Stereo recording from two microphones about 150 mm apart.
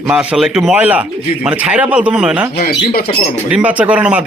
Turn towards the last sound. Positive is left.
turn(degrees=-10)  # may be behind; listen again after turning